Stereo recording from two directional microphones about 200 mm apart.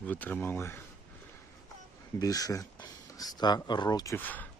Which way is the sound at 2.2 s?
20° left (ahead or behind).